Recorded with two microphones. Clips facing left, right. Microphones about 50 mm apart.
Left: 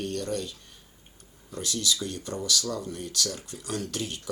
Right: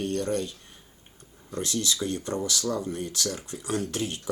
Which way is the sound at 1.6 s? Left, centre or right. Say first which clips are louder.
Right 1 dB; right.